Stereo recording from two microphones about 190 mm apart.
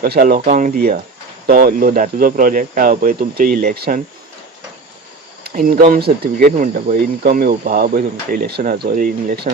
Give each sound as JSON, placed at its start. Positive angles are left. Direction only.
{"t": 0.0, "sound": "speech", "side_deg": -50}
{"t": 5.4, "sound": "speech", "side_deg": -50}